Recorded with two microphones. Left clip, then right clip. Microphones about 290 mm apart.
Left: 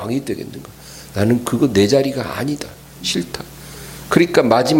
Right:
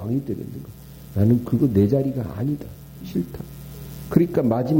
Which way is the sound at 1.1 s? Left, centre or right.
Centre.